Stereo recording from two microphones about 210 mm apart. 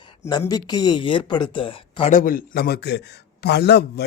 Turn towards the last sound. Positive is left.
turn(degrees=50)  # may be behind; listen again after turning